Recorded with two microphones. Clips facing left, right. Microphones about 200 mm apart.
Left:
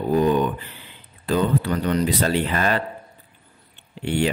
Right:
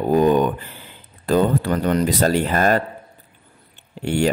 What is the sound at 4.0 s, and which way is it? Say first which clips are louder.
Speech: right 2 dB; 45° right (ahead or behind).